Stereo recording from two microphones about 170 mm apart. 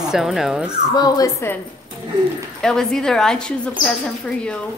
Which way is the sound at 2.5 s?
5° left (ahead or behind).